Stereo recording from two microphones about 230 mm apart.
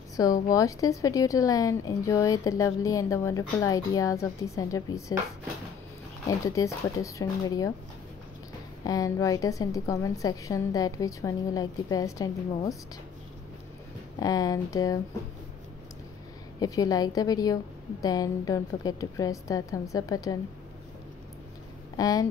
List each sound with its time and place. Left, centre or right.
0.1 s a woman's voice: centre
6.2 s a woman's voice: centre
8.8 s a woman's voice: centre
14.2 s a woman's voice: centre
16.5 s a woman's voice: centre
21.9 s speech: centre